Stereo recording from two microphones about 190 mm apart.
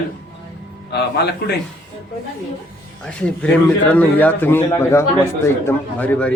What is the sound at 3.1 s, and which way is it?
A man's voice, 5° left (ahead or behind).